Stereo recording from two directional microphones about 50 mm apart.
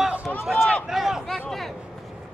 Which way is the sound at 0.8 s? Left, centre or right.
Centre.